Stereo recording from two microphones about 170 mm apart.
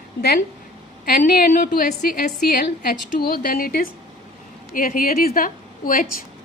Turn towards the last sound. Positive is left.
turn(degrees=55)  # may be behind; listen again after turning